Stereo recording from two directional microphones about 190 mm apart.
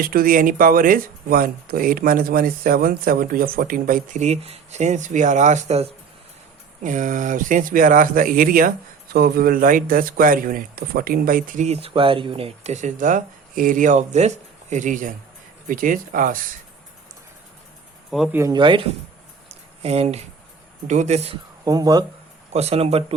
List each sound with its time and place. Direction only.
0.0 s a man's voice: 50° right (ahead or behind)
18.1 s speech: centre (ahead or behind)
18.3 s speech: 20° right (ahead or behind)
19.8 s speech: 30° right (ahead or behind)
21.6 s speech: 20° right (ahead or behind)
22.5 s speech: 30° right (ahead or behind)